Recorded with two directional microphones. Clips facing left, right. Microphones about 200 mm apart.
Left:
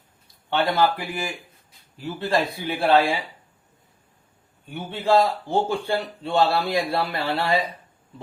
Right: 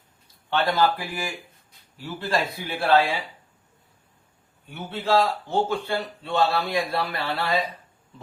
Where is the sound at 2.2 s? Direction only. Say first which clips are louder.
Left 3 dB; 15° left (ahead or behind).